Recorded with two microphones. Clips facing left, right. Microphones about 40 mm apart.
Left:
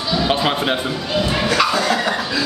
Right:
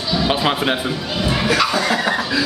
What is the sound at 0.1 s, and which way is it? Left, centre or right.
Speech, centre.